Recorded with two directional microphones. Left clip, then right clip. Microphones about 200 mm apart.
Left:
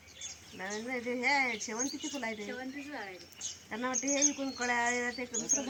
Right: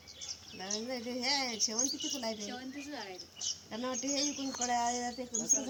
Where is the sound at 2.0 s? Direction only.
15° left (ahead or behind).